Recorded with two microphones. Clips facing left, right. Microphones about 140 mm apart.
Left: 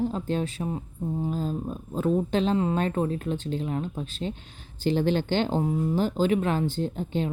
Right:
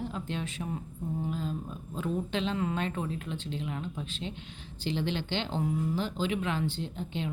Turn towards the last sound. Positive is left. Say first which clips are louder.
# left 8 dB
turn(degrees=45)  # may be behind; listen again after turning